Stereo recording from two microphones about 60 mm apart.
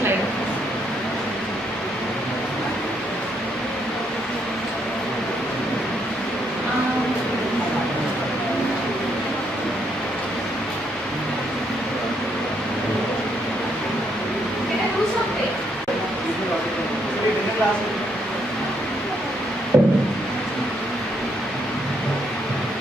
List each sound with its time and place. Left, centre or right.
19.7 s music: right